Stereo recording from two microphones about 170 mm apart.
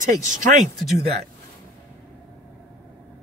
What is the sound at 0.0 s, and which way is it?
Speech, 50° right (ahead or behind).